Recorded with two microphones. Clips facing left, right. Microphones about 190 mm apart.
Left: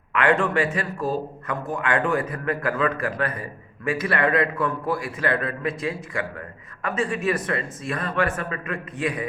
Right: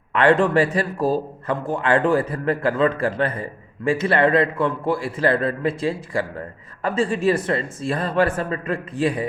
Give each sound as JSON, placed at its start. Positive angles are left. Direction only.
{"t": 0.1, "sound": "a man's voice", "side_deg": -30}